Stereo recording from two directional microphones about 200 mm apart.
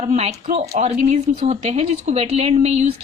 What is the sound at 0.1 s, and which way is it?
Speech, 35° right (ahead or behind).